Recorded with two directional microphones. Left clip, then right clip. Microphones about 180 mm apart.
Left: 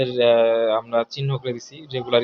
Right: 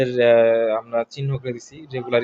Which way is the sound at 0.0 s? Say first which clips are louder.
Right 2 dB; 30° right (ahead or behind).